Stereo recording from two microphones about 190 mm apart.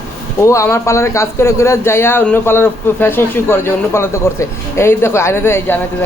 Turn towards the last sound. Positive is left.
turn(degrees=10)  # may be behind; listen again after turning